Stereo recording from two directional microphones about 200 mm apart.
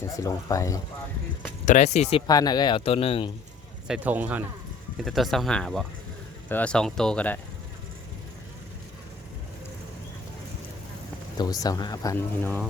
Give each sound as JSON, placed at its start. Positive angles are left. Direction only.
{"t": 0.2, "sound": "speech", "side_deg": 15}
{"t": 1.6, "sound": "speech", "side_deg": 35}
{"t": 3.8, "sound": "speech", "side_deg": -5}
{"t": 11.3, "sound": "speech", "side_deg": 20}